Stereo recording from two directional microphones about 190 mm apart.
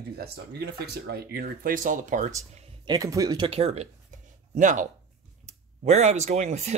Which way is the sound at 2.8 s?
20° right (ahead or behind).